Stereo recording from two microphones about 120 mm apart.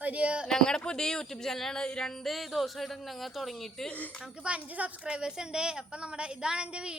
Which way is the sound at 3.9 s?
15° left (ahead or behind).